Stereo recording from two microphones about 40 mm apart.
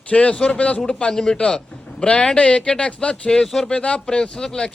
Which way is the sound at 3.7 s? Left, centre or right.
Left.